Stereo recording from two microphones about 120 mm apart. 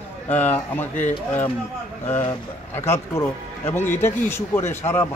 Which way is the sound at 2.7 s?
20° left (ahead or behind).